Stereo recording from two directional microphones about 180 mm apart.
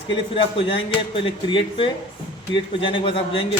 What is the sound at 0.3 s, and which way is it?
A man's voice, 30° left (ahead or behind).